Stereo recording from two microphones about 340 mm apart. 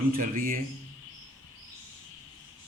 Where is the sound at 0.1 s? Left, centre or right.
Right.